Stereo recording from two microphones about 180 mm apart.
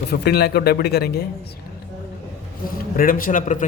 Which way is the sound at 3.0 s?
50° left (ahead or behind).